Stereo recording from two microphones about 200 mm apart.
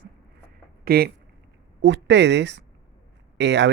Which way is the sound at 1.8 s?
60° right (ahead or behind).